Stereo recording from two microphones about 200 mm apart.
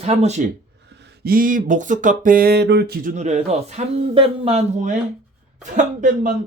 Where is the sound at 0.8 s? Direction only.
60° right (ahead or behind).